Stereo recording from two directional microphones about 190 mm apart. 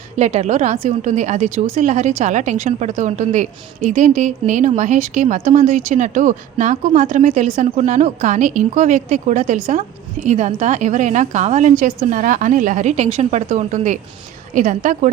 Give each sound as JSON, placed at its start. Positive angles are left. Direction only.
{"t": 0.2, "sound": "a woman's voice", "side_deg": -35}